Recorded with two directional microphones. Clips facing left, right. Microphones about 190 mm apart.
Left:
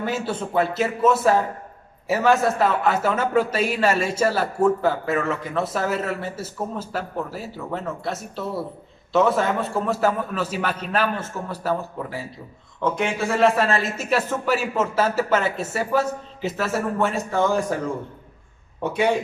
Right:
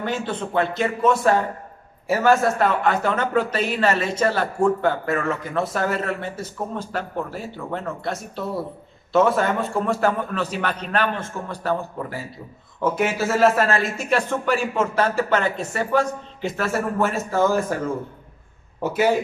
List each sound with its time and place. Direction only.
0.0 s a man's voice: 5° left (ahead or behind)